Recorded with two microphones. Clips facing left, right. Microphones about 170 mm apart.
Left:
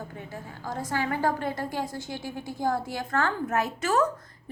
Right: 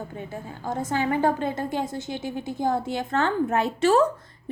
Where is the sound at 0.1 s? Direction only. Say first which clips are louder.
Right 4 dB; 25° right (ahead or behind).